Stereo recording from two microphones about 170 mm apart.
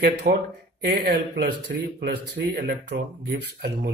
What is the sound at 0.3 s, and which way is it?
Speech, 60° right (ahead or behind).